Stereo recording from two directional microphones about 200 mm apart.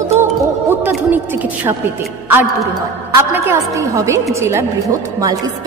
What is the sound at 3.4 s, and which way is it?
A woman's voice, 15° right (ahead or behind).